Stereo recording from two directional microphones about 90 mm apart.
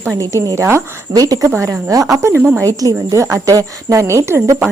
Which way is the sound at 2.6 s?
40° right (ahead or behind).